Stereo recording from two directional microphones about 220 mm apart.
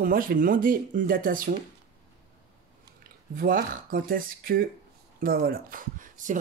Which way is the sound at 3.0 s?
40° right (ahead or behind).